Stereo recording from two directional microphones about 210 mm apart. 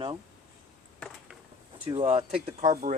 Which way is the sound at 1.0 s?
Centre (ahead or behind).